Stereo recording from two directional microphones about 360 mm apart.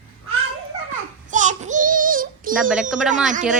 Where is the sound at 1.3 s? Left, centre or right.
Centre.